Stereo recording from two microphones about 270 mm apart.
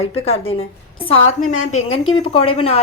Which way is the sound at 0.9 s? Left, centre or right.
Left.